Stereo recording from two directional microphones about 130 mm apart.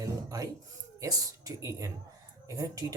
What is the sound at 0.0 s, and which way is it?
Music, 25° right (ahead or behind).